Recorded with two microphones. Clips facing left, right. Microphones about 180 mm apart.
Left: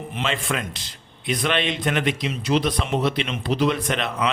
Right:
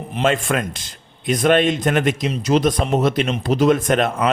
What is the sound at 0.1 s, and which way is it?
A man's voice, 45° right (ahead or behind).